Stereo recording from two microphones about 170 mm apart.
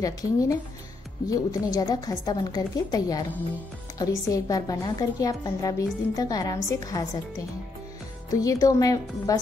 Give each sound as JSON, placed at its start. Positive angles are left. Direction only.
{"t": 0.0, "sound": "a woman's voice", "side_deg": 20}